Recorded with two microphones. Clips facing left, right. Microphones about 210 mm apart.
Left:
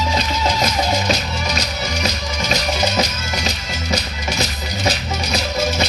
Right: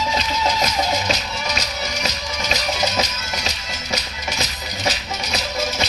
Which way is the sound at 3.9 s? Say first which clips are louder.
Left 4 dB; 30° left (ahead or behind).